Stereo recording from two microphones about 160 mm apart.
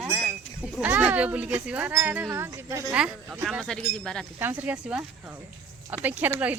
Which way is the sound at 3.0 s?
5° right (ahead or behind).